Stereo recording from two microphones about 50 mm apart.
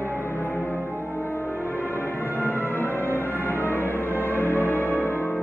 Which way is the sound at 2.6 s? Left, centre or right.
Left.